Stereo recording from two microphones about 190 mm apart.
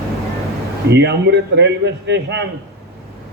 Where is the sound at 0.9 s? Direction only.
60° right (ahead or behind).